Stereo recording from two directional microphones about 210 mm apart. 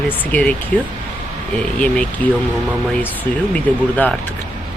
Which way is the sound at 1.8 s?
5° left (ahead or behind).